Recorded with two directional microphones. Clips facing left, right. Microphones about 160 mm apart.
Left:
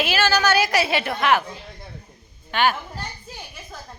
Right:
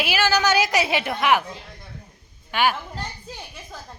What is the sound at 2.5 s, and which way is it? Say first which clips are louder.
Speech: left 1 dB; 10° right (ahead or behind).